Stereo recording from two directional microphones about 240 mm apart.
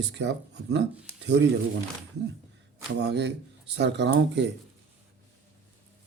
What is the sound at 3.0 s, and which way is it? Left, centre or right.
Speech, right.